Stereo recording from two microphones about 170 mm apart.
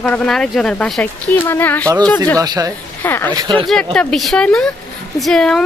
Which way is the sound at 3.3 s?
25° right (ahead or behind).